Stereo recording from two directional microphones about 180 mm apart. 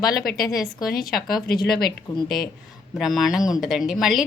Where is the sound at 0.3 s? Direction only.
20° left (ahead or behind).